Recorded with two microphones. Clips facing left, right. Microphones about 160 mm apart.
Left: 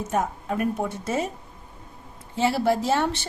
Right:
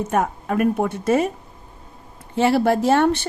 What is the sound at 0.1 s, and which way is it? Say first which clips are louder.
A woman's voice: right 2 dB; 65° right (ahead or behind).